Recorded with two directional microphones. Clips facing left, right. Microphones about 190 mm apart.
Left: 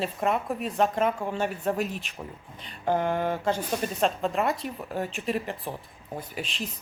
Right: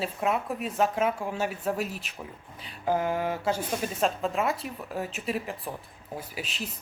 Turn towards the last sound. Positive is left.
turn(degrees=-5)  # may be behind; listen again after turning